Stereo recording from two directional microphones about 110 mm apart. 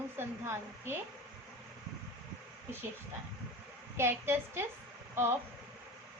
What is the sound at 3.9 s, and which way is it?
A woman's voice, 20° right (ahead or behind).